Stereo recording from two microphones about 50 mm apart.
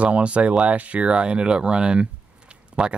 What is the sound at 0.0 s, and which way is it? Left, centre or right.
Speech, right.